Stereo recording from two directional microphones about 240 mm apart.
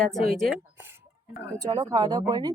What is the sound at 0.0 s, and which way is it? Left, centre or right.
Speech, centre.